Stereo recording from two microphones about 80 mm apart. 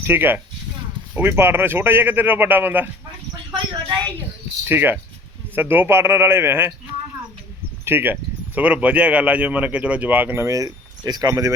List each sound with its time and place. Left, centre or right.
0.0 s speech: right
3.5 s a sound: right
4.6 s speech: right
7.9 s speech: right
10.4 s speech: right